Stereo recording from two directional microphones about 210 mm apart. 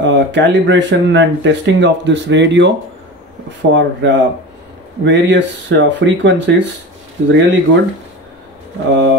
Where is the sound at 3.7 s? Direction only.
60° right (ahead or behind).